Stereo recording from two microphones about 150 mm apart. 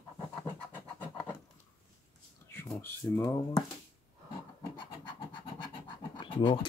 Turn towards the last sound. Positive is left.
turn(degrees=35)  # may be behind; listen again after turning